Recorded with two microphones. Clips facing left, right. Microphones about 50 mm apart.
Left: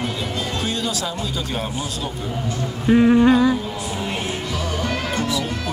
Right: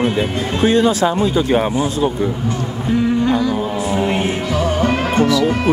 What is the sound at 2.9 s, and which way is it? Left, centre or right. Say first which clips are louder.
Music: left 3 dB; left.